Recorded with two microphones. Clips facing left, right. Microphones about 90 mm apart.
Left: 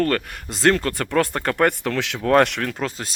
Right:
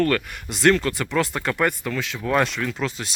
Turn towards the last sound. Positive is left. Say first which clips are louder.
# even
turn(degrees=40)  # may be behind; listen again after turning